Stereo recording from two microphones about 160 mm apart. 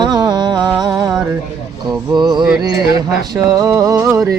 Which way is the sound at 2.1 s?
25° right (ahead or behind).